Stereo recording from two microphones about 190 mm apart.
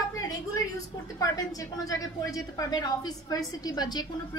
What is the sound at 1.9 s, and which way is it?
Speech, 20° left (ahead or behind).